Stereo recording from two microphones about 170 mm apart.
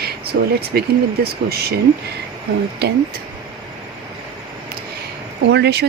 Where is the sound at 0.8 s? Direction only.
70° right (ahead or behind).